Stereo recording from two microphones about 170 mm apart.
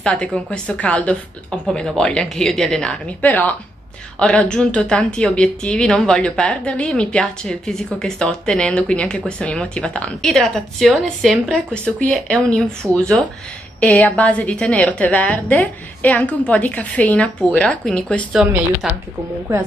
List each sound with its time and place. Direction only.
0.0 s a woman's voice: 5° left (ahead or behind)
18.3 s a woman's voice: 5° right (ahead or behind)